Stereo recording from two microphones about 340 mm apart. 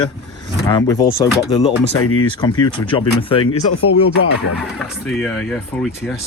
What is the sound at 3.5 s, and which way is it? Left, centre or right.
Speech, left.